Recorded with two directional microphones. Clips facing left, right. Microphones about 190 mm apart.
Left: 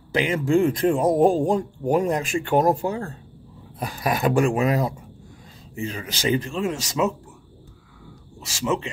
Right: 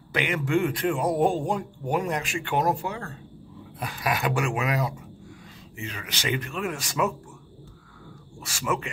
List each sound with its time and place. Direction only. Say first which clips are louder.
0.1 s a man's voice: left 5 dB; 30° left (ahead or behind)
8.4 s a man's voice: left 4 dB; 25° left (ahead or behind)